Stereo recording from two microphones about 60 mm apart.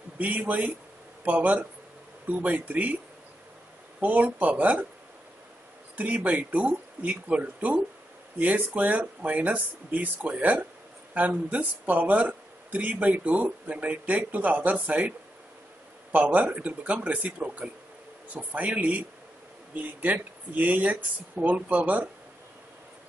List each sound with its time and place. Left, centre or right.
0.2 s speech: right
4.0 s speech: right
5.9 s speech: right